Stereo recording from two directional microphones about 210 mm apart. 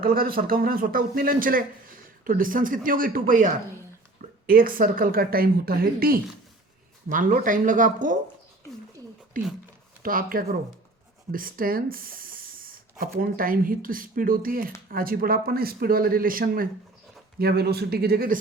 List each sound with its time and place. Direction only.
0.0 s speech: 45° right (ahead or behind)
10.0 s speech: 40° right (ahead or behind)